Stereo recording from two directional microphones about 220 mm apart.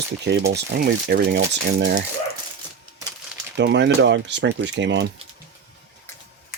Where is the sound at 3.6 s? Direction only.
55° right (ahead or behind).